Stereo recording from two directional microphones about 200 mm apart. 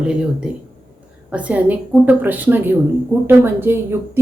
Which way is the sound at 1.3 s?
5° right (ahead or behind).